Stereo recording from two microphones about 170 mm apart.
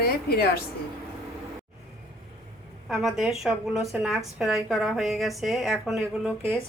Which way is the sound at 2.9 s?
Centre (ahead or behind).